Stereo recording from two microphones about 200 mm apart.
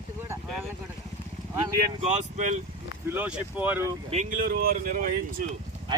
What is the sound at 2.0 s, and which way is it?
Speech, 35° right (ahead or behind).